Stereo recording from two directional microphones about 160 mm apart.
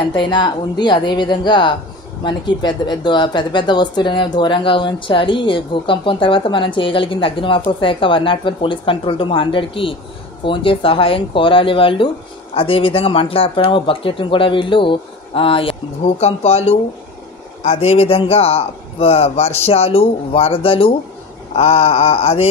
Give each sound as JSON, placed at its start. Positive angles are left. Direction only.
{"t": 0.0, "sound": "a woman's voice", "side_deg": 30}